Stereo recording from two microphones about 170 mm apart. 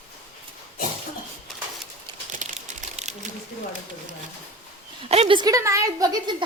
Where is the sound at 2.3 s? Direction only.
45° right (ahead or behind).